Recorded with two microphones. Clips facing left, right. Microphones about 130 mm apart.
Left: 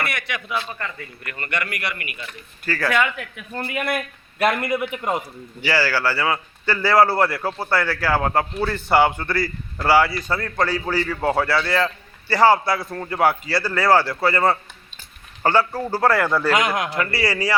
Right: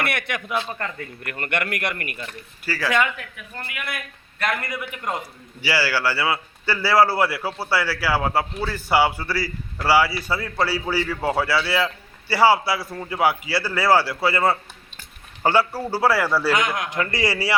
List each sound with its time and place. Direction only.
0.1 s a man's voice: 55° right (ahead or behind)
2.6 s a man's voice: 5° right (ahead or behind)
3.7 s speech: 40° left (ahead or behind)
4.6 s a man's voice: 25° left (ahead or behind)
5.6 s a man's voice: 10° right (ahead or behind)
16.5 s a man's voice: 20° left (ahead or behind)
16.9 s a man's voice: 15° right (ahead or behind)